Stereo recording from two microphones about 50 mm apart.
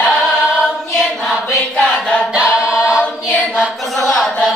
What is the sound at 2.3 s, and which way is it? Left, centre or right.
Choir, right.